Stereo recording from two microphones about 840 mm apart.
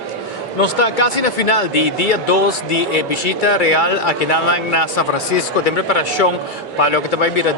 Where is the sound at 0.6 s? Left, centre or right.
Left.